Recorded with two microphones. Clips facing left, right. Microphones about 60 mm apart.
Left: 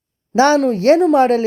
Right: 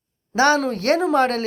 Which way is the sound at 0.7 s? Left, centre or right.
Left.